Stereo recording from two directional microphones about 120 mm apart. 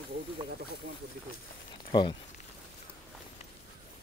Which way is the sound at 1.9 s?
45° left (ahead or behind).